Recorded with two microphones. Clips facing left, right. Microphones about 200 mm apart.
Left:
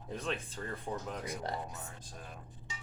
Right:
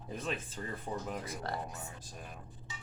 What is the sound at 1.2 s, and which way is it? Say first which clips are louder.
Speech: left 1 dB; 20° left (ahead or behind).